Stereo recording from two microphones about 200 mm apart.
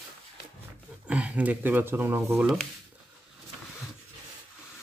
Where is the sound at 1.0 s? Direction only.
5° right (ahead or behind).